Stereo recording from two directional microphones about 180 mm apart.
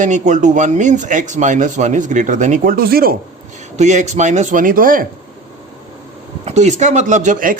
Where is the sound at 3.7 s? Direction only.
40° right (ahead or behind).